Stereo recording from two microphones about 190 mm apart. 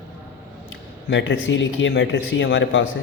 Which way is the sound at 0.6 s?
70° left (ahead or behind).